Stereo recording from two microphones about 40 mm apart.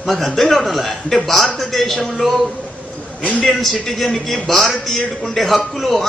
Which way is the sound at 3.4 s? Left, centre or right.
Centre.